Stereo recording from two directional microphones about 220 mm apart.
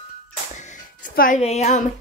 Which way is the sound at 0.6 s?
35° left (ahead or behind).